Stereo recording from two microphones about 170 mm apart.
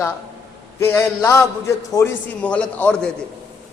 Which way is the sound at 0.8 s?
15° left (ahead or behind).